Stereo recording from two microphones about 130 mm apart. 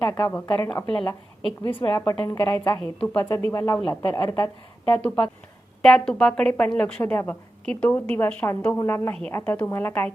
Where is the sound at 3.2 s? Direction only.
25° left (ahead or behind).